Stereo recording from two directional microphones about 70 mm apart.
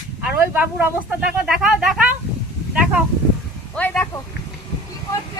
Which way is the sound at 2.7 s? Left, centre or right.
Centre.